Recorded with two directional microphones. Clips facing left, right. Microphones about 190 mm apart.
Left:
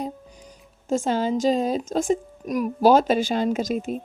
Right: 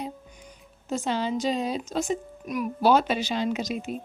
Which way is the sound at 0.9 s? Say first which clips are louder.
Left 5 dB; 45° left (ahead or behind).